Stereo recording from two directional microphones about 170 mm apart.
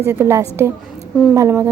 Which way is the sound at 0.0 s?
15° right (ahead or behind).